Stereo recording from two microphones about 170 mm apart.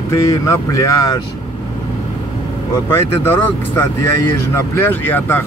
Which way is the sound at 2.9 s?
15° left (ahead or behind).